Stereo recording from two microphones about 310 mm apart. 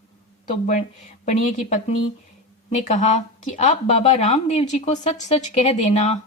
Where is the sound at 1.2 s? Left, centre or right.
Left.